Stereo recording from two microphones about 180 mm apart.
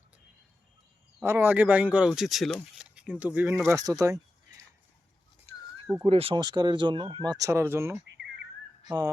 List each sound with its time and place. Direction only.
1.2 s speech: 15° right (ahead or behind)
3.8 s speech: 20° right (ahead or behind)
6.1 s speech: 30° right (ahead or behind); by 8.0 s 15° right (ahead or behind)